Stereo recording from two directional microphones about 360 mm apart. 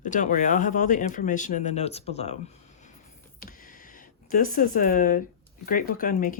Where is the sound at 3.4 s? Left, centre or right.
Left.